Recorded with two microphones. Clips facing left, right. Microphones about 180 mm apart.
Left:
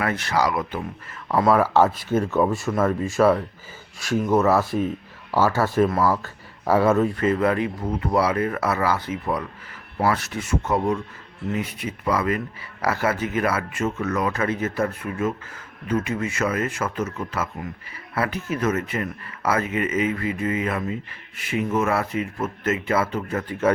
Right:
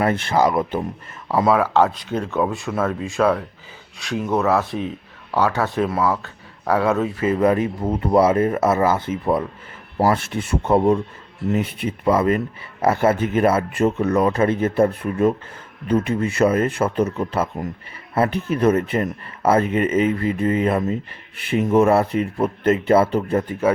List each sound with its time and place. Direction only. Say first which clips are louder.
0.0 s speech: right 5 dB; 25° right (ahead or behind)
1.3 s speech: right 1 dB; 5° right (ahead or behind)
7.3 s speech: right 3 dB; 20° right (ahead or behind)
11.5 s speech: right 5 dB; 60° right (ahead or behind)
11.9 s speech: right 6 dB; 25° right (ahead or behind)